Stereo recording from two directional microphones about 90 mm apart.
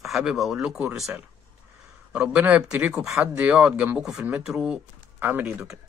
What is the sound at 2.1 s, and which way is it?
Speech, 20° right (ahead or behind).